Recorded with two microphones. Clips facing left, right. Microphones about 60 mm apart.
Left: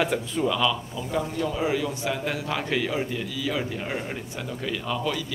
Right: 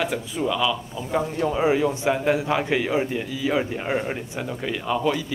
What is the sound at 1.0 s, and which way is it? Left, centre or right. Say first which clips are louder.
Speech: right 1 dB; centre.